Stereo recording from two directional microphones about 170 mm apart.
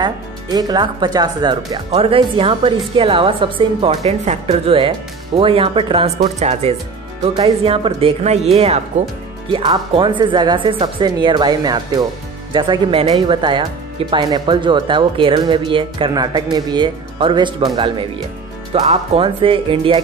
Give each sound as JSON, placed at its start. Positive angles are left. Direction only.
{"t": 0.0, "sound": "a woman's voice", "side_deg": -25}